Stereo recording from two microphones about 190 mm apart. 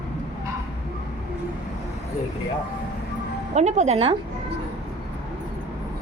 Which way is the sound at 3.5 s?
35° right (ahead or behind).